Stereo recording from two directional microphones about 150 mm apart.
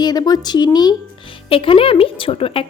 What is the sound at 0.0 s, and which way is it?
A woman's voice, 25° left (ahead or behind).